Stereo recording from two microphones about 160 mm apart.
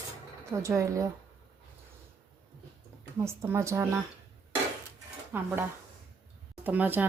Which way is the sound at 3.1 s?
15° right (ahead or behind).